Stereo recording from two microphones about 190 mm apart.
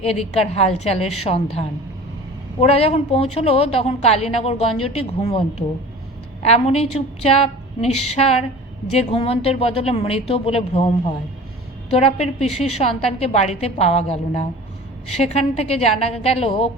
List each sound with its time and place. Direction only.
0.0 s speech: 30° left (ahead or behind)